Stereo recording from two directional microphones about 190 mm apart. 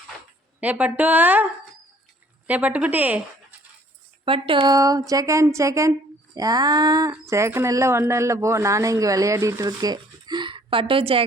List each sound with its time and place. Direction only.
0.6 s speech: 10° right (ahead or behind)
2.5 s speech: 10° right (ahead or behind)
4.3 s speech: 30° right (ahead or behind)